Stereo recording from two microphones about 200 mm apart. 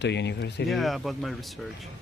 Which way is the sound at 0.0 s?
60° left (ahead or behind).